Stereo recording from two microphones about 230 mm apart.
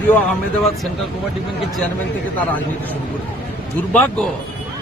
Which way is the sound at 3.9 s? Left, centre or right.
Centre.